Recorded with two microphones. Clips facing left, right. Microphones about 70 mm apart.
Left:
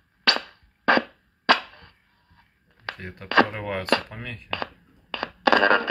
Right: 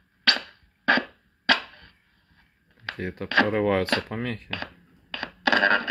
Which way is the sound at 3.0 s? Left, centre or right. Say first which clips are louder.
Right 7 dB; right.